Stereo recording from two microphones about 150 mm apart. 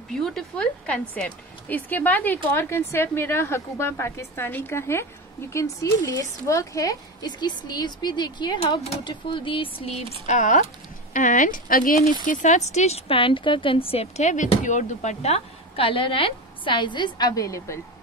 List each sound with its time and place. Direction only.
0.1 s a woman's voice: centre (ahead or behind); by 17.7 s 20° left (ahead or behind)